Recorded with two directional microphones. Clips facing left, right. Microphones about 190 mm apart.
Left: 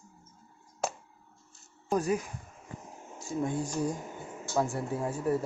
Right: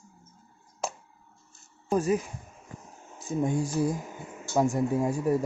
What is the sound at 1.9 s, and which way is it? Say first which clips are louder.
Speech: right 3 dB; 5° right (ahead or behind).